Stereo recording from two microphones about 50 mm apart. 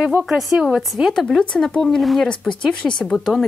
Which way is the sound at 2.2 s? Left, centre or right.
Centre.